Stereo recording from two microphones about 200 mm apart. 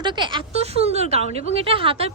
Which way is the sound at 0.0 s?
25° right (ahead or behind).